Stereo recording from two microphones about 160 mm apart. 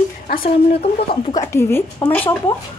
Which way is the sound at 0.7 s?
40° left (ahead or behind).